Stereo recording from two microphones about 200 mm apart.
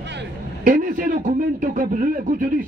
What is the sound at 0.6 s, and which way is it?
A man's voice, 40° right (ahead or behind).